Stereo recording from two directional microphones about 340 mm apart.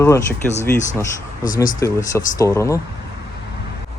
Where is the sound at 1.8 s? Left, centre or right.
Centre.